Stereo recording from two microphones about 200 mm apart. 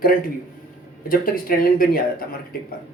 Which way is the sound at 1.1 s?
45° left (ahead or behind).